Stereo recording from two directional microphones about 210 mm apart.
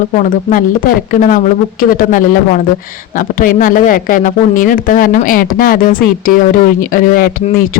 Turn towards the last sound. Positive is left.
turn(degrees=40)  # may be behind; listen again after turning